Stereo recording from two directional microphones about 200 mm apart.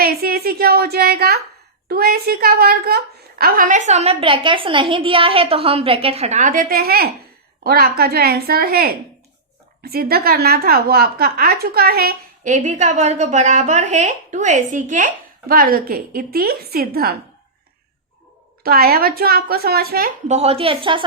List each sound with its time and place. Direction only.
0.0 s a woman's voice: 50° right (ahead or behind)
18.6 s a woman's voice: 50° right (ahead or behind)
20.2 s a woman's voice: 35° right (ahead or behind)